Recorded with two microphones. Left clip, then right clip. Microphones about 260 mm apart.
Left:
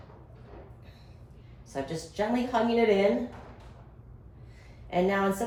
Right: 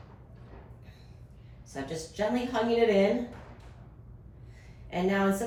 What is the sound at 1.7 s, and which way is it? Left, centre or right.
Speech, centre.